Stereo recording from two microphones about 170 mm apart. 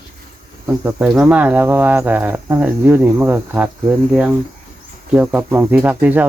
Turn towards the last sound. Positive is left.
turn(degrees=-10)  # may be behind; listen again after turning